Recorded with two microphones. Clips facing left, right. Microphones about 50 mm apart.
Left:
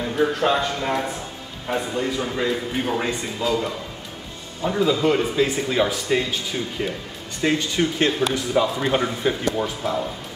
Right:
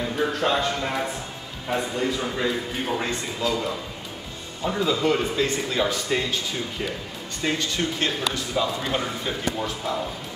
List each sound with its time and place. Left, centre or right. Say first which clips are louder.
0.0 s a man's voice: left 3 dB; centre
9.6 s speech: left 3 dB; centre